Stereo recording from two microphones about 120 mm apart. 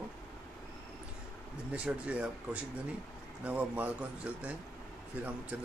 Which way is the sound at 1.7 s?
10° right (ahead or behind).